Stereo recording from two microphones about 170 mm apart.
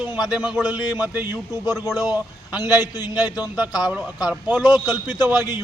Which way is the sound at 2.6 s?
20° left (ahead or behind).